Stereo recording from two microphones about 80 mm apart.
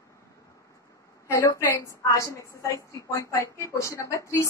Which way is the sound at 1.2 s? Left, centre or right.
Left.